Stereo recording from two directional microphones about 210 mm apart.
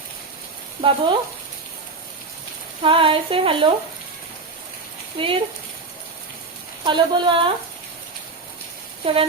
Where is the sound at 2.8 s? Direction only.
25° right (ahead or behind).